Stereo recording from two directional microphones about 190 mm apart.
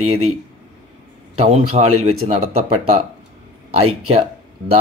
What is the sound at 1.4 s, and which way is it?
Speech, 35° right (ahead or behind).